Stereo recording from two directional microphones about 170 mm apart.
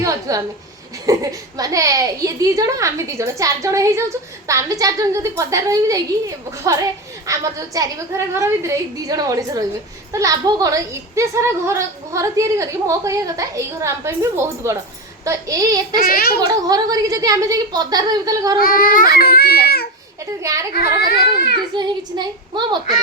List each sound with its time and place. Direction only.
0.0 s a sound: 20° right (ahead or behind)
1.0 s a child's voice: 20° right (ahead or behind)
16.0 s a child's voice: 60° left (ahead or behind)
16.5 s a child's voice: 20° right (ahead or behind)
18.6 s a child's voice: 55° left (ahead or behind)
20.4 s a child's voice: 20° right (ahead or behind)
21.8 s a child's voice: 25° right (ahead or behind)